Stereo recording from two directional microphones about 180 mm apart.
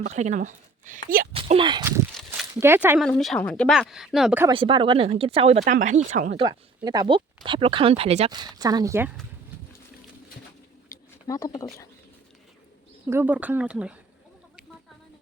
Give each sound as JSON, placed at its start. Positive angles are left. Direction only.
{"t": 0.0, "sound": "speech", "side_deg": -40}
{"t": 1.3, "sound": "speech", "side_deg": -30}
{"t": 2.1, "sound": "walk", "side_deg": 0}
{"t": 2.6, "sound": "speech", "side_deg": -10}
{"t": 3.0, "sound": "speech", "side_deg": 0}
{"t": 4.5, "sound": "speech", "side_deg": -30}
{"t": 6.3, "sound": "speech", "side_deg": -25}
{"t": 8.3, "sound": "speech", "side_deg": -20}
{"t": 10.8, "sound": "a sound", "side_deg": 20}
{"t": 13.1, "sound": "speech", "side_deg": -10}